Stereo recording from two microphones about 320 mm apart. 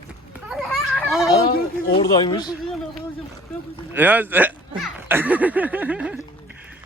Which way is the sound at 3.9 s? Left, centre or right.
Centre.